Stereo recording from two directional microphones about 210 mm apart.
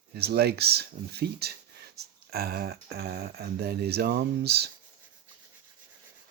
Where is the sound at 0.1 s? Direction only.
50° right (ahead or behind).